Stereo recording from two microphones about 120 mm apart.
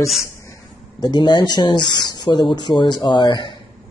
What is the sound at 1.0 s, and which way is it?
A man's voice, 40° left (ahead or behind).